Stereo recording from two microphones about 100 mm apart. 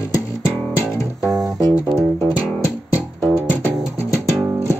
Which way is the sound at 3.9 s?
30° left (ahead or behind).